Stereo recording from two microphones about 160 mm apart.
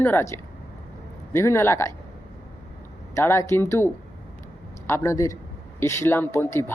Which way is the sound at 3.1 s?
15° left (ahead or behind).